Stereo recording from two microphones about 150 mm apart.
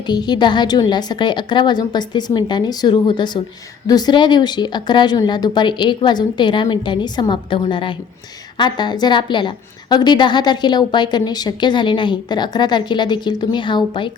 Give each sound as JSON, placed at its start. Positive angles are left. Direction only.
{"t": 0.0, "sound": "a woman's voice", "side_deg": 30}